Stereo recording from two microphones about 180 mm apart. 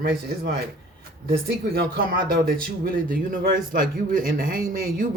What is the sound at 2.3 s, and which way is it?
A man's voice, 55° right (ahead or behind).